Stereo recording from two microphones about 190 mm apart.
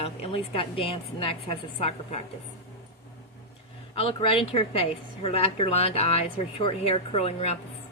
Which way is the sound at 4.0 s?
30° left (ahead or behind).